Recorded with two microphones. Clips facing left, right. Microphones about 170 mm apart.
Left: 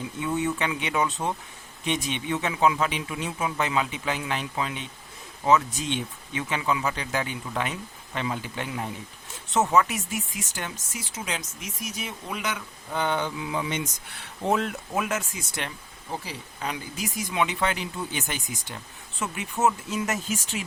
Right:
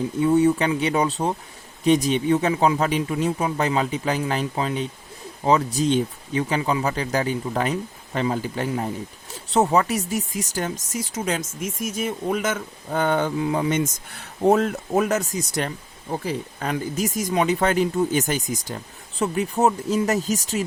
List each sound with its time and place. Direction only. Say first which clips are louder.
0.2 s speech: right 9 dB; 35° right (ahead or behind)
16.2 s speech: right 7 dB; 50° right (ahead or behind)